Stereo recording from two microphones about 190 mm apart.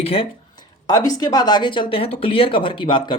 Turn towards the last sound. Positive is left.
turn(degrees=25)  # may be behind; listen again after turning